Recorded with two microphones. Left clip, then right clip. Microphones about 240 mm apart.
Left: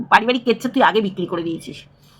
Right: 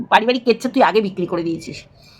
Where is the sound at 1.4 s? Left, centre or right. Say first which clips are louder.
Right 2 dB; right.